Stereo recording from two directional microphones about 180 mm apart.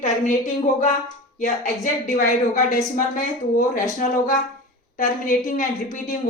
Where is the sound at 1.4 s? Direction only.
45° left (ahead or behind).